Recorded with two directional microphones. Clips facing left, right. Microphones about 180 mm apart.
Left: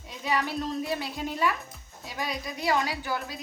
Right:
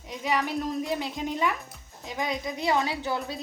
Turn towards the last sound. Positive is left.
turn(degrees=-25)  # may be behind; listen again after turning